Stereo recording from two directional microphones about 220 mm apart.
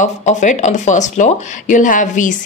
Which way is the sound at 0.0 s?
35° left (ahead or behind).